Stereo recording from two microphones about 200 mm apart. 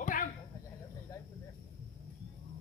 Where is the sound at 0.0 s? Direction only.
40° left (ahead or behind).